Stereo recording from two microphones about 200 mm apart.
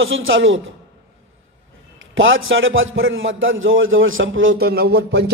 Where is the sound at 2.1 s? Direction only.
75° right (ahead or behind).